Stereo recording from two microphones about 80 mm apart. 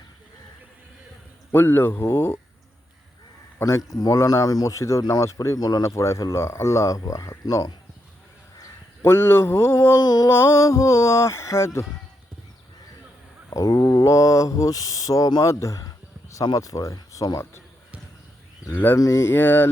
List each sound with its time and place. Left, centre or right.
1.5 s speech: left
3.6 s speech: left
5.8 s speech: left
9.0 s speech: left
10.0 s speech: left
13.5 s speech: left
15.4 s a sound: left
16.6 s speech: left
18.7 s speech: left
18.9 s speech: left